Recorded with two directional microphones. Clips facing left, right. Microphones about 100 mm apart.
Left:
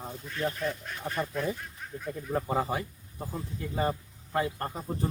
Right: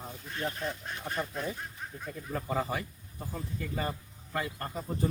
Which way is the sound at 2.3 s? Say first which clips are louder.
Left 3 dB; 25° left (ahead or behind).